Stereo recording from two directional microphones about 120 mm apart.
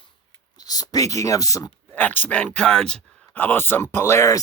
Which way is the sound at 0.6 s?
30° left (ahead or behind).